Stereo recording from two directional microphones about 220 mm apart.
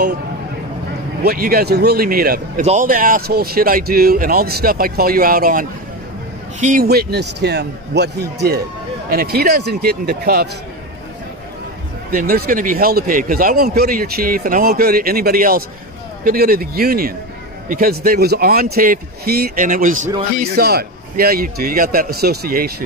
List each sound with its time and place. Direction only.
1.2 s a man's voice: 45° right (ahead or behind)
12.1 s a man's voice: 40° right (ahead or behind)